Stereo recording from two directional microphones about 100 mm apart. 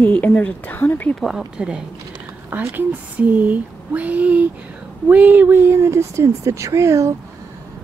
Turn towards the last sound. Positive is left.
turn(degrees=-30)  # may be behind; listen again after turning